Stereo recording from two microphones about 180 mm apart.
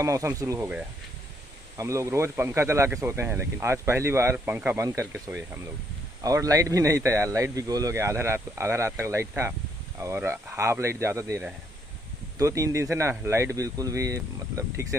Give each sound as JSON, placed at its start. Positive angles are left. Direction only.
{"t": 0.0, "sound": "speech", "side_deg": -15}
{"t": 1.8, "sound": "speech", "side_deg": -15}